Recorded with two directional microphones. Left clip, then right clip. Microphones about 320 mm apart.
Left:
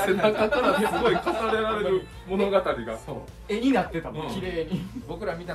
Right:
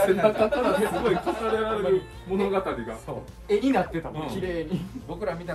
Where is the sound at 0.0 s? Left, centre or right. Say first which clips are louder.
Right 1 dB; centre.